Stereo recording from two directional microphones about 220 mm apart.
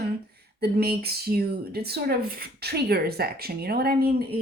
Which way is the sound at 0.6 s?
45° right (ahead or behind).